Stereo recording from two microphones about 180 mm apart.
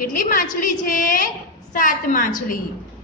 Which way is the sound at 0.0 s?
50° left (ahead or behind).